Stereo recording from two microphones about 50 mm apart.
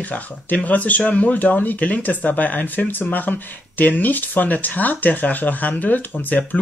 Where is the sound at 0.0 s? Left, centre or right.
Left.